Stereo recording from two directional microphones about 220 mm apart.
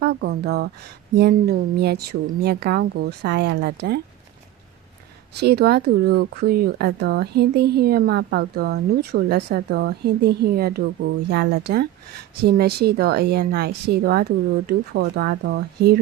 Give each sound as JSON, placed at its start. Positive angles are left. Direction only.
{"t": 0.0, "sound": "speech", "side_deg": -50}
{"t": 5.3, "sound": "speech", "side_deg": -45}